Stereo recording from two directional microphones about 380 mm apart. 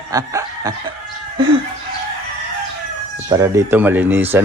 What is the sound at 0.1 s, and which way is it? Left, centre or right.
Chicken, centre.